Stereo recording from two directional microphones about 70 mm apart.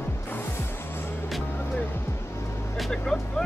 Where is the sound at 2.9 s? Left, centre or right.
Centre.